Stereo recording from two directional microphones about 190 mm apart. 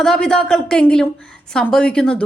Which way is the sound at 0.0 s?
5° left (ahead or behind).